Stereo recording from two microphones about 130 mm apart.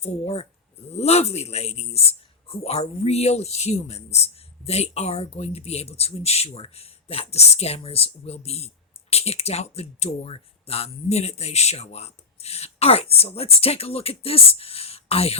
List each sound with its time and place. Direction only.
0.0 s speech: 55° left (ahead or behind)